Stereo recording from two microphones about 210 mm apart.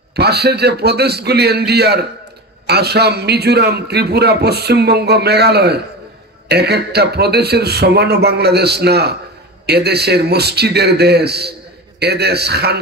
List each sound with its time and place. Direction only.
0.1 s a man's voice: 50° right (ahead or behind)